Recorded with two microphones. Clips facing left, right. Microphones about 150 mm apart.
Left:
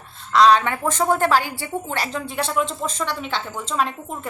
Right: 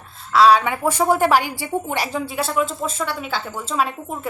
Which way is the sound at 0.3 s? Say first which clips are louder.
Right 1 dB; 10° right (ahead or behind).